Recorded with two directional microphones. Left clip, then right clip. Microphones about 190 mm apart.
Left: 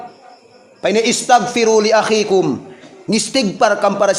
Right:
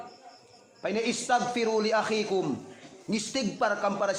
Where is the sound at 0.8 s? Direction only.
30° left (ahead or behind).